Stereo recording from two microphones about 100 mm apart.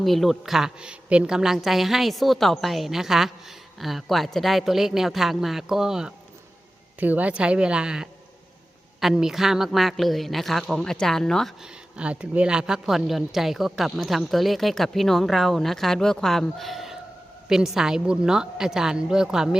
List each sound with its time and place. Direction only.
0.0 s a woman's voice: centre (ahead or behind)
11.6 s a woman's voice: 10° right (ahead or behind)